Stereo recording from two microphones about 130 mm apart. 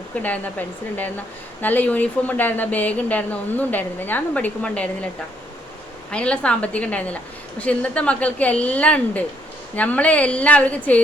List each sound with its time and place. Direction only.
1.6 s speech: 15° left (ahead or behind)
6.1 s speech: 10° left (ahead or behind)